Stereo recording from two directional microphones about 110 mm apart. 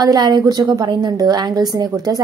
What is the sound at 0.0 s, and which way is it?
A woman's voice, 40° right (ahead or behind).